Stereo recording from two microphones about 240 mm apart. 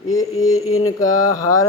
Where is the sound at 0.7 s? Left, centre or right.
Left.